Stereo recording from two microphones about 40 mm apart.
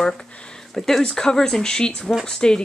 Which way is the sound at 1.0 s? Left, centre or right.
Centre.